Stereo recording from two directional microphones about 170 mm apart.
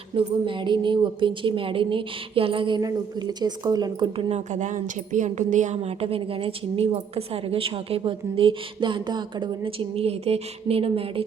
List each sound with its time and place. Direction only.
0.2 s a woman's voice: 30° right (ahead or behind)
4.3 s a woman's voice: 45° right (ahead or behind)